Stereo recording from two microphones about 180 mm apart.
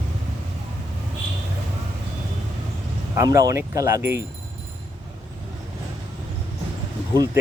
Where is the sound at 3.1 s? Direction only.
15° right (ahead or behind).